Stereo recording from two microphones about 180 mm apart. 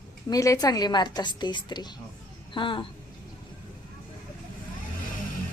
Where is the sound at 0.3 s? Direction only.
20° left (ahead or behind).